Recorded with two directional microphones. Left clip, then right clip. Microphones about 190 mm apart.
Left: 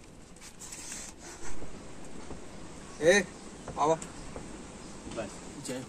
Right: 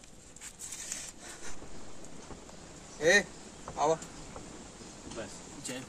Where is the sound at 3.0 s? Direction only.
Centre (ahead or behind).